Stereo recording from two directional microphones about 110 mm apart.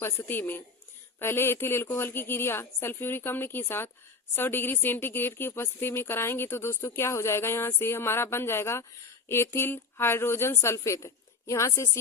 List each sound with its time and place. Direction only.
0.0 s a woman's voice: 20° left (ahead or behind)